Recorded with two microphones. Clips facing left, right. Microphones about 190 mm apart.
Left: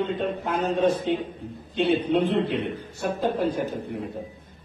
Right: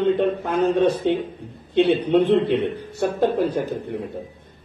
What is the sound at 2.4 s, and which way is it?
Speech, 70° right (ahead or behind).